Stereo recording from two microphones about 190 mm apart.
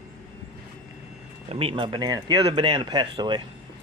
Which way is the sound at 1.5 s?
30° right (ahead or behind).